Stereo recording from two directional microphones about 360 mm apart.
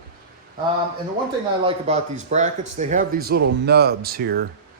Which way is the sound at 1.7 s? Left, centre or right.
Centre.